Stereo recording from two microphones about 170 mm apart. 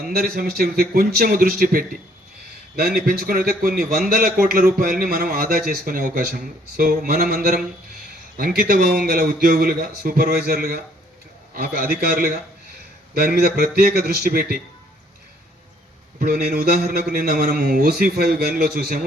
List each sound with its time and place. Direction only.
0.0 s a man's voice: 65° right (ahead or behind)
8.6 s a man's voice: 60° right (ahead or behind)
16.2 s a man's voice: 60° right (ahead or behind)